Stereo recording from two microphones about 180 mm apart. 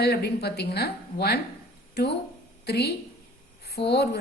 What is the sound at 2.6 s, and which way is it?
Speech, 65° left (ahead or behind).